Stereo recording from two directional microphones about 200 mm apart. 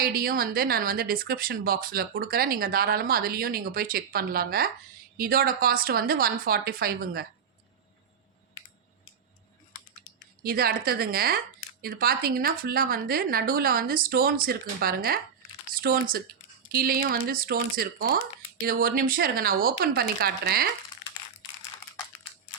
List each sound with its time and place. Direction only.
0.0 s a woman's voice: 50° right (ahead or behind)
10.4 s a woman's voice: 50° right (ahead or behind)